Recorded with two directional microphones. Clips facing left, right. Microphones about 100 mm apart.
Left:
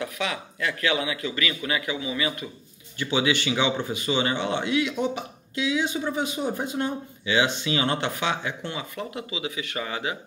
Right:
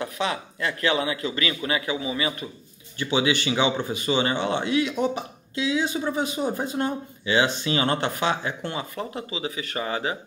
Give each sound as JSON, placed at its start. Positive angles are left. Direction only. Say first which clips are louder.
{"t": 0.0, "sound": "speech", "louder": "right 2 dB", "side_deg": -30}